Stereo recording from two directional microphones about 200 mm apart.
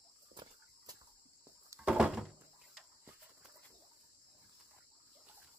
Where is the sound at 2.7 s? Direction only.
10° right (ahead or behind).